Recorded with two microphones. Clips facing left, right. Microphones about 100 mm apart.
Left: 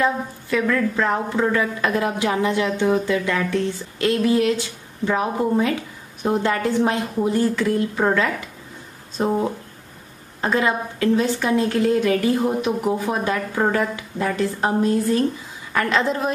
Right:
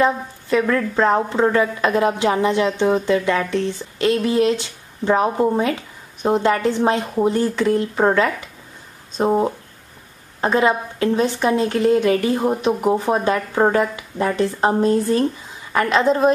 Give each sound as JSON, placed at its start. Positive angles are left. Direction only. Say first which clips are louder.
{"t": 0.0, "sound": "a woman's voice", "louder": "right 3 dB", "side_deg": -25}
{"t": 15.7, "sound": "a woman's voice", "louder": "right 4 dB", "side_deg": -20}